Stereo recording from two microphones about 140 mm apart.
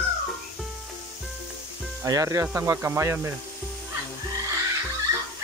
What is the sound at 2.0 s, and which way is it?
Speech, 25° right (ahead or behind).